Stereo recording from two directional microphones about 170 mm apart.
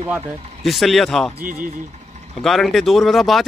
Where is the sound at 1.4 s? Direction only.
55° right (ahead or behind).